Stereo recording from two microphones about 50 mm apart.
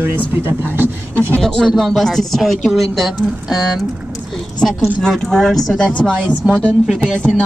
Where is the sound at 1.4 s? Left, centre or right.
Centre.